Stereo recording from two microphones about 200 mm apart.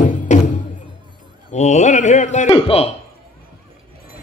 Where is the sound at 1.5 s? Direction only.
35° left (ahead or behind).